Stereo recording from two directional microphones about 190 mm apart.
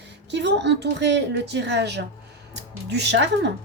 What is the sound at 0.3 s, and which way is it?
A woman's voice, 65° right (ahead or behind).